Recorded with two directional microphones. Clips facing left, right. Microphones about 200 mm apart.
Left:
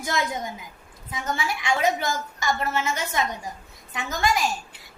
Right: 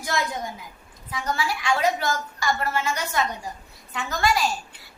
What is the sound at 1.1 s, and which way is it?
A woman's voice, 20° left (ahead or behind).